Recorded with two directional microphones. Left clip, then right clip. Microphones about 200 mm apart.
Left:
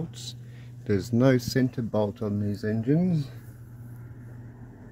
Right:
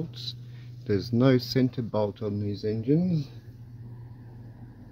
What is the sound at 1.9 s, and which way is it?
Speech, 20° left (ahead or behind).